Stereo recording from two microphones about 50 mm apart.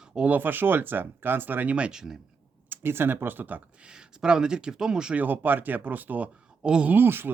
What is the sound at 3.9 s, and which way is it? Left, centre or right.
Speech, centre.